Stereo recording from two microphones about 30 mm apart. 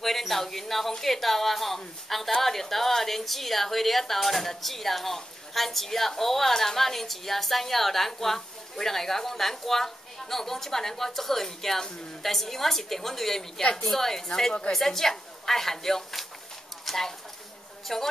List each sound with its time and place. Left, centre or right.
0.0 s a woman's voice: centre
13.6 s a woman's voice: left
13.8 s a woman's voice: centre
16.8 s a sound: centre
17.9 s a woman's voice: centre